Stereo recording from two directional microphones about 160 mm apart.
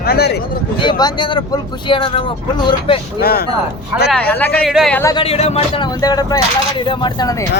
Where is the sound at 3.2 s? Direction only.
75° left (ahead or behind).